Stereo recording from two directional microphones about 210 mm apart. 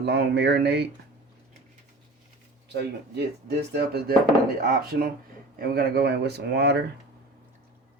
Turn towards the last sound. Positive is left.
turn(degrees=-55)  # may be behind; listen again after turning